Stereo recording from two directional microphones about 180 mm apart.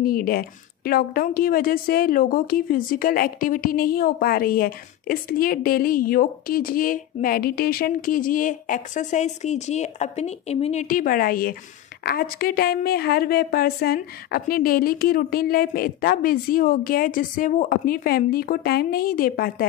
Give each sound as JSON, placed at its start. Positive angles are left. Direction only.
{"t": 0.0, "sound": "a woman's voice", "side_deg": 55}